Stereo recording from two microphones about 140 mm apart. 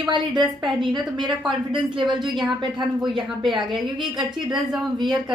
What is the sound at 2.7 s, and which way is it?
A woman's voice, 35° right (ahead or behind).